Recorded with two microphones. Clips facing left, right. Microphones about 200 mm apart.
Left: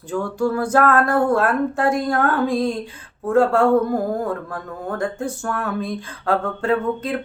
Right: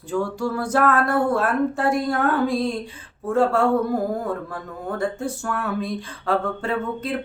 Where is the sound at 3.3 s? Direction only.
5° right (ahead or behind).